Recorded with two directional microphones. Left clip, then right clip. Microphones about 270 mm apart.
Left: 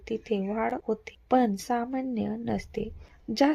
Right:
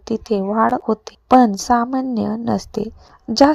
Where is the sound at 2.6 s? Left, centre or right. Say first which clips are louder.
Right 10 dB; right.